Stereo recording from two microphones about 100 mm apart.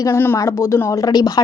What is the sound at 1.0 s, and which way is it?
Speech, 40° left (ahead or behind).